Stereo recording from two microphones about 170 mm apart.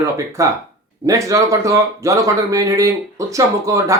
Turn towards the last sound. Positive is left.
turn(degrees=-20)  # may be behind; listen again after turning